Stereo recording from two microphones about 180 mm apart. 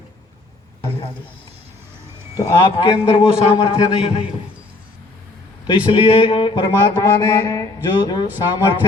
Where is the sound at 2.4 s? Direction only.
25° left (ahead or behind).